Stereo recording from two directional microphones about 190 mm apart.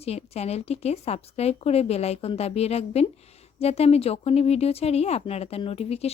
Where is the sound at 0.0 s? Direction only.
35° left (ahead or behind).